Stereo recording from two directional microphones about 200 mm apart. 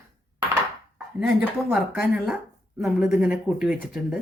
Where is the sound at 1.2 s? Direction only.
5° right (ahead or behind).